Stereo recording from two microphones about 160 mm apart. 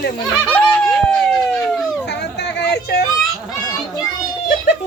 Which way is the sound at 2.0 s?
90° left.